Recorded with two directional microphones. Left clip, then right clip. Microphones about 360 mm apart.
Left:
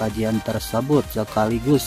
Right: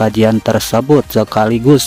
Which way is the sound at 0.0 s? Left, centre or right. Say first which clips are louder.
Right 12 dB; right.